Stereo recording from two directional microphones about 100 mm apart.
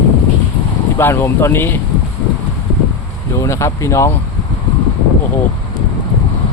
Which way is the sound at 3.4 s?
30° left (ahead or behind).